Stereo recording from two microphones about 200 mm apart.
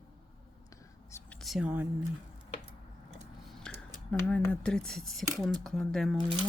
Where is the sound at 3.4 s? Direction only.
5° left (ahead or behind).